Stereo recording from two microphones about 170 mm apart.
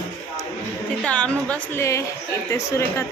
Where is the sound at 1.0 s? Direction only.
5° left (ahead or behind).